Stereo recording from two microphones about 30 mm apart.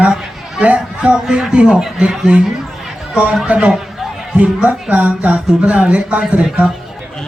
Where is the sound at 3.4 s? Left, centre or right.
Right.